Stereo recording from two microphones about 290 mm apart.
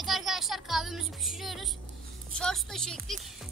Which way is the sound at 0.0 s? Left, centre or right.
Centre.